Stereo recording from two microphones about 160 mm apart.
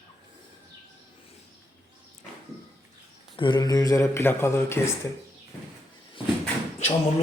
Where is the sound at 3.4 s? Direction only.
25° left (ahead or behind).